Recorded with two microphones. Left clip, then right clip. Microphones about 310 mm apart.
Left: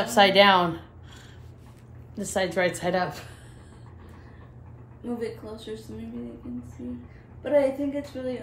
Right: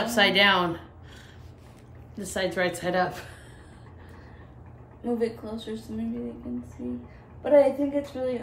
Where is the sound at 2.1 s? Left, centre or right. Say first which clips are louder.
Left 2 dB; centre.